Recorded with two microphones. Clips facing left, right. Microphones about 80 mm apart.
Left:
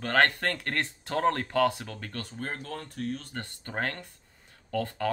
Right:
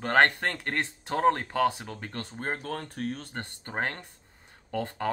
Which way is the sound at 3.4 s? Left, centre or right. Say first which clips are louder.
Right 1 dB; right.